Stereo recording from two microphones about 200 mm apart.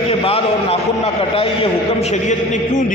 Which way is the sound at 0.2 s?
30° left (ahead or behind).